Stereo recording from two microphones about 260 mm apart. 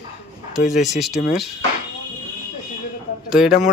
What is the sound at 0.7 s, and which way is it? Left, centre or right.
Speech, centre.